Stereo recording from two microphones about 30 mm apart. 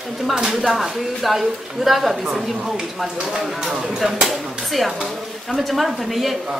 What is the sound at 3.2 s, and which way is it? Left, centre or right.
Speech, right.